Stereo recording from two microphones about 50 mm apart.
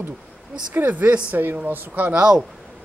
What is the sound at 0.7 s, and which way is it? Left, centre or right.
Speech, right.